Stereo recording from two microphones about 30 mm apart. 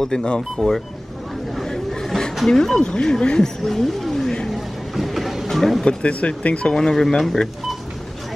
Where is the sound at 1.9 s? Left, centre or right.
Centre.